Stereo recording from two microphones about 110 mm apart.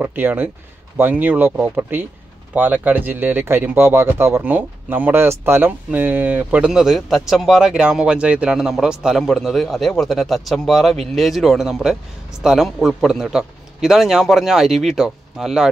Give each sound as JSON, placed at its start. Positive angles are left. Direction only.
{"t": 0.0, "sound": "a man's voice", "side_deg": -15}